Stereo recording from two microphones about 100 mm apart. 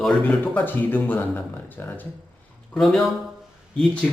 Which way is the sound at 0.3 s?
15° left (ahead or behind).